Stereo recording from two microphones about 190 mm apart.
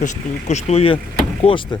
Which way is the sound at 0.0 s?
35° left (ahead or behind).